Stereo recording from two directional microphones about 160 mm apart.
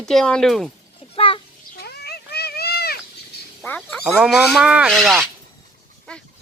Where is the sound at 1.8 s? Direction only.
80° left.